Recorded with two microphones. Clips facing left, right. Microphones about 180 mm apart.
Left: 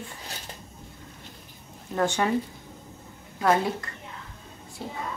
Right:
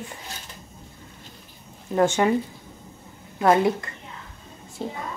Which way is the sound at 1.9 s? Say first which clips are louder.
Right 5 dB; 20° right (ahead or behind).